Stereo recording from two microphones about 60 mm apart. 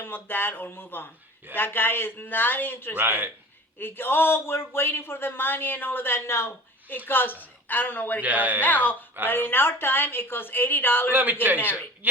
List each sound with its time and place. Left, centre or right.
0.0 s speech: left
2.9 s a man's voice: right
3.8 s speech: left
6.8 s a woman's voice: left
8.2 s speech: right
8.6 s speech: left
11.1 s a man's voice: right